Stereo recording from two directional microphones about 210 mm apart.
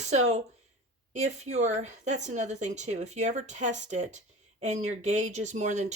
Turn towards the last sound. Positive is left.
turn(degrees=-35)  # may be behind; listen again after turning